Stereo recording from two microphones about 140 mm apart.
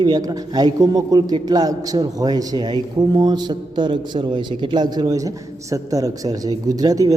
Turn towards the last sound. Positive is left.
turn(degrees=-25)  # may be behind; listen again after turning